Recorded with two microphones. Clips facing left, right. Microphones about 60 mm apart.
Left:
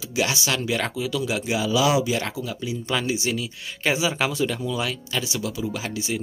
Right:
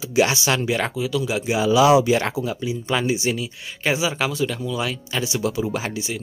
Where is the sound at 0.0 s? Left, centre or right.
Right.